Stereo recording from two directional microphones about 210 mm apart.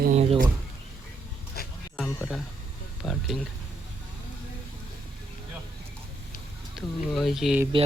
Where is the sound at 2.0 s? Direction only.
5° left (ahead or behind).